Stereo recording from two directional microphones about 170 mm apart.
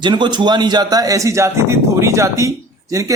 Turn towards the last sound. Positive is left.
turn(degrees=-20)  # may be behind; listen again after turning